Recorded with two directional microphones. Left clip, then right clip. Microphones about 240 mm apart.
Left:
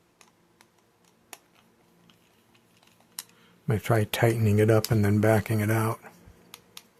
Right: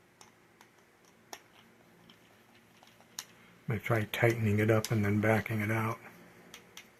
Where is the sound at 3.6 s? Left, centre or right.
Left.